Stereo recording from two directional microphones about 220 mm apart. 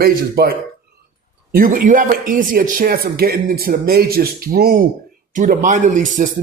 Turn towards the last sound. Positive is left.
turn(degrees=-35)  # may be behind; listen again after turning